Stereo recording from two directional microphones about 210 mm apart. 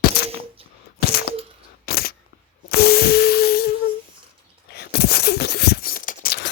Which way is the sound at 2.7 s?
45° left (ahead or behind).